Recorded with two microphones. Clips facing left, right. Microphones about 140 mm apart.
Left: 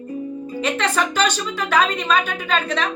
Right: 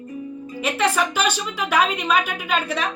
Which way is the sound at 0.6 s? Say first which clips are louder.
Right 1 dB; 10° right (ahead or behind).